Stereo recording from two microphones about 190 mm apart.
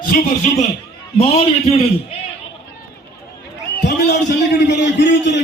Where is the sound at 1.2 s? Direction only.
30° left (ahead or behind).